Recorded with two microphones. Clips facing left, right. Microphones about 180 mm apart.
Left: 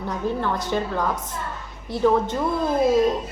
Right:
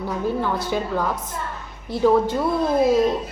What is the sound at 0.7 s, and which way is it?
Speech, 10° right (ahead or behind).